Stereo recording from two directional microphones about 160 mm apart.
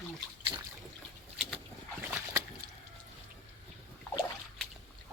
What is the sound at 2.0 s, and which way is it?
Splash, 15° right (ahead or behind).